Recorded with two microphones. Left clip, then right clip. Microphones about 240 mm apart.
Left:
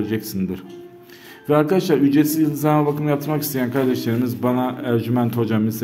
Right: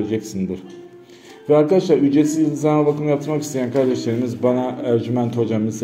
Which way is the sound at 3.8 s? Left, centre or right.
Left.